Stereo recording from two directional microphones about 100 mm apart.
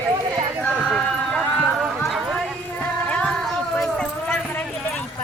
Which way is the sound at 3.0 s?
10° left (ahead or behind).